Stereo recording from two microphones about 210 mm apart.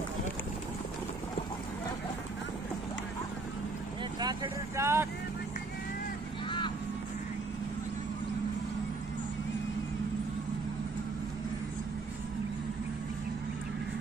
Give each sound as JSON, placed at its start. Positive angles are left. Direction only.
{"t": 4.2, "sound": "speech", "side_deg": -20}